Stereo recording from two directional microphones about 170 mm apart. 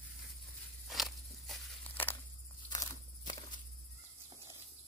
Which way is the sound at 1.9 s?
10° left (ahead or behind).